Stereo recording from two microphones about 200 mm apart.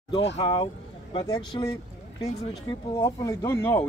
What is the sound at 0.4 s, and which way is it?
Speech, 25° left (ahead or behind).